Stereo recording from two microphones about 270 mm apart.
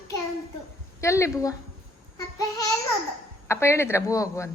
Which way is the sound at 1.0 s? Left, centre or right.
Centre.